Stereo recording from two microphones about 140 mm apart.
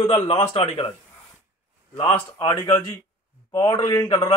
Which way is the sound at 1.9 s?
40° left (ahead or behind).